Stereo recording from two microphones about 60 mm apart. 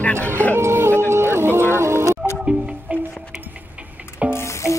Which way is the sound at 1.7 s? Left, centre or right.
Right.